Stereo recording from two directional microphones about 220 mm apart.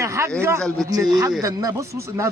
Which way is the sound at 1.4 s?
15° right (ahead or behind).